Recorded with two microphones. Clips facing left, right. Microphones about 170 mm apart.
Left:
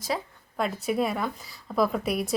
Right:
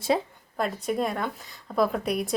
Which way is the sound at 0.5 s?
Centre (ahead or behind).